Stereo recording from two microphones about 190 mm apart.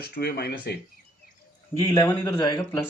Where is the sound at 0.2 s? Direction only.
55° left (ahead or behind).